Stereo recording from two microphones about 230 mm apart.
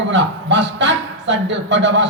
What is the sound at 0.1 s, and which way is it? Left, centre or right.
Speech, right.